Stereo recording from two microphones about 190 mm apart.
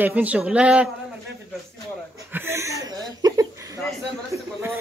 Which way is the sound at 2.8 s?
20° right (ahead or behind).